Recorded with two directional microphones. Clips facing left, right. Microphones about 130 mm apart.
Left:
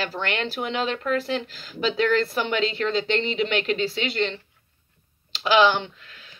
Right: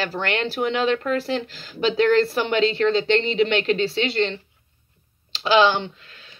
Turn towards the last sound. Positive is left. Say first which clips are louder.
# right 4 dB
turn(degrees=-30)  # may be behind; listen again after turning